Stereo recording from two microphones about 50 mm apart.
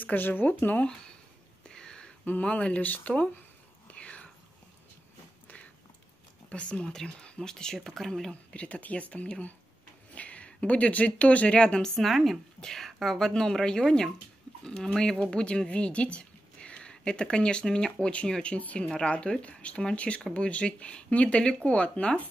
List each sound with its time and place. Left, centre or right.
0.0 s speech: left
1.6 s a sound: centre
2.4 s speech: left
3.8 s whispering: left
6.5 s speech: left
8.5 s speech: left
12.1 s a woman's voice: centre; by 22.2 s left